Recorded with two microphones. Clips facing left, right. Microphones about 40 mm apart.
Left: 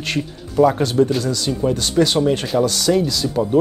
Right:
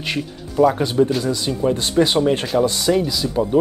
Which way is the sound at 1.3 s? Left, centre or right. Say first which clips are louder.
Even; right.